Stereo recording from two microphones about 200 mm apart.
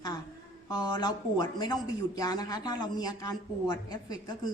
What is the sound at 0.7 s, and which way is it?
A woman's voice, 20° left (ahead or behind).